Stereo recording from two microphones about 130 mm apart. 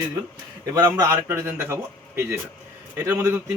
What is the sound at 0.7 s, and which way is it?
A man's voice, 30° right (ahead or behind).